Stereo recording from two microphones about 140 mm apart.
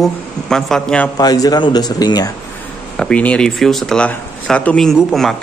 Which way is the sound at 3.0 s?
10° left (ahead or behind).